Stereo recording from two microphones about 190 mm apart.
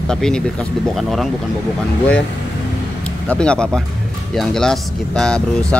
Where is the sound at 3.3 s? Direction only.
5° left (ahead or behind).